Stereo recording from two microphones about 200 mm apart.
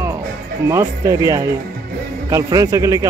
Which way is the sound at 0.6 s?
15° right (ahead or behind).